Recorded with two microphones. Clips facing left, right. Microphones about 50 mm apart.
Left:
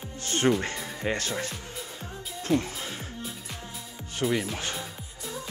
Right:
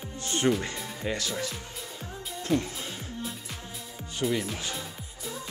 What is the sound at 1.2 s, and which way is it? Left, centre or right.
Speech, left.